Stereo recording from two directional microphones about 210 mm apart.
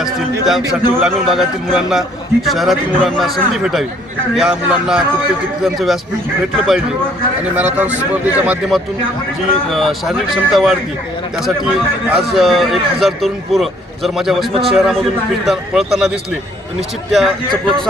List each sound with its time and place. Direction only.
0.0 s a sound: centre (ahead or behind)
0.7 s a man's voice: centre (ahead or behind)
7.5 s a man's voice: 10° right (ahead or behind)